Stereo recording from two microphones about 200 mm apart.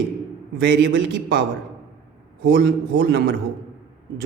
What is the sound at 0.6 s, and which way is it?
A man's voice, 60° right (ahead or behind).